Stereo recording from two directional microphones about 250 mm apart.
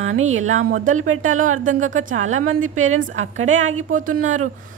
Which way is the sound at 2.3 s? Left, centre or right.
Right.